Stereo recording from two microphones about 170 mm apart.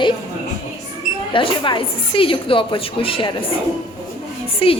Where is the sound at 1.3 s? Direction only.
30° left (ahead or behind).